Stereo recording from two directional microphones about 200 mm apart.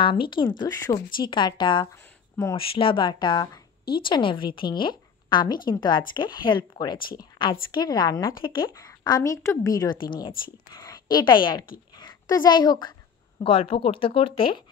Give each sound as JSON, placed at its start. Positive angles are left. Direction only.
{"t": 0.0, "sound": "a woman's voice", "side_deg": 25}